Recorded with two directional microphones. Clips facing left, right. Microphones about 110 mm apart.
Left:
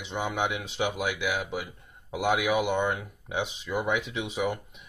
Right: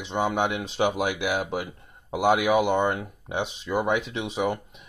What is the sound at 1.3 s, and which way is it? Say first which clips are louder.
Speech: right 4 dB; 55° right (ahead or behind).